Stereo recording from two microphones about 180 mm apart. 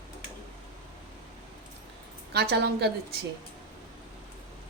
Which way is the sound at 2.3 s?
65° right (ahead or behind).